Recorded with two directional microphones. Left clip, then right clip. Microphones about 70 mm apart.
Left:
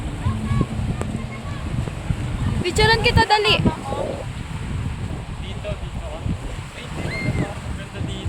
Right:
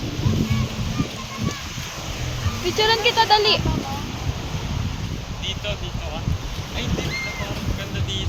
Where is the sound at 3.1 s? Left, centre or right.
Left.